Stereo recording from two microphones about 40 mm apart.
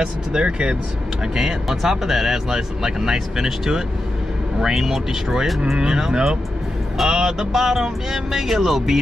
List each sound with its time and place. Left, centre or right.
0.0 s speech: right